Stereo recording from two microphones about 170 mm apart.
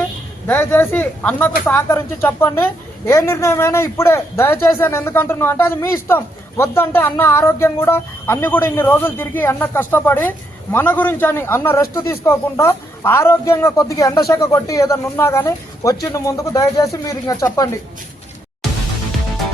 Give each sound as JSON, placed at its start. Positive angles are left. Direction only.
{"t": 0.4, "sound": "a man's voice", "side_deg": 10}